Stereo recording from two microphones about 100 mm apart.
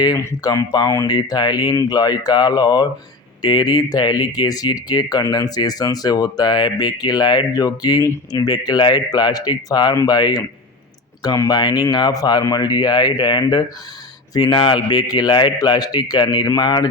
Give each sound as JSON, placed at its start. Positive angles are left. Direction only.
{"t": 0.4, "sound": "speech", "side_deg": 40}